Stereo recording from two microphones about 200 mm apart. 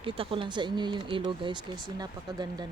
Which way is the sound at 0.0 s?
25° right (ahead or behind).